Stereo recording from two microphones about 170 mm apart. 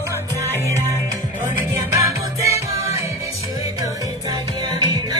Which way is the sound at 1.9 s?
15° right (ahead or behind).